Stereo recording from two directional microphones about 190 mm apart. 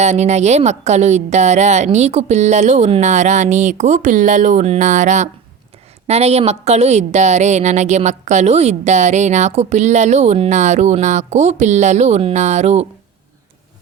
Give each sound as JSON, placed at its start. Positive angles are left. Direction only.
{"t": 0.0, "sound": "a woman's voice", "side_deg": -35}